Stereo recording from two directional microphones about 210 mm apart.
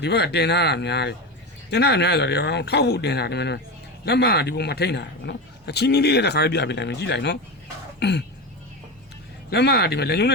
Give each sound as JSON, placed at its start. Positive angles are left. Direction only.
{"t": 0.0, "sound": "speech", "side_deg": 50}
{"t": 7.9, "sound": "throat clearing", "side_deg": 55}
{"t": 9.5, "sound": "speech", "side_deg": 50}